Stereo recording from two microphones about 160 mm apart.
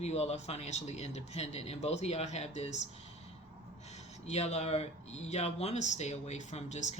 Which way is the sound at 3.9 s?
45° left (ahead or behind).